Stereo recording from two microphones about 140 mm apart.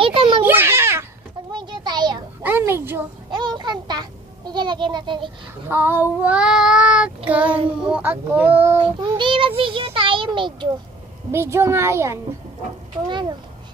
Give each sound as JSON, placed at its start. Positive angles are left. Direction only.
{"t": 0.0, "sound": "children playing", "side_deg": -40}
{"t": 0.4, "sound": "a sound", "side_deg": -15}
{"t": 1.5, "sound": "a sound", "side_deg": -35}
{"t": 2.4, "sound": "a child's voice", "side_deg": -15}
{"t": 3.3, "sound": "a child's voice", "side_deg": -30}
{"t": 5.7, "sound": "child singing", "side_deg": -15}
{"t": 8.8, "sound": "child singing", "side_deg": -35}
{"t": 9.6, "sound": "a child's voice", "side_deg": -40}
{"t": 11.3, "sound": "a child's voice", "side_deg": -15}
{"t": 13.1, "sound": "child singing", "side_deg": -35}